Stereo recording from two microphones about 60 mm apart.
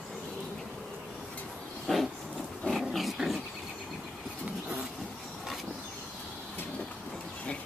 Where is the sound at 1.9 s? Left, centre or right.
Centre.